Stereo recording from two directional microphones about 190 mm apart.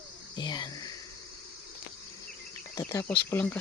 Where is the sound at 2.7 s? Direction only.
15° left (ahead or behind).